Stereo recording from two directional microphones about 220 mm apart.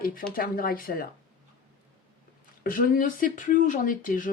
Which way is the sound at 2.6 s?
40° left (ahead or behind).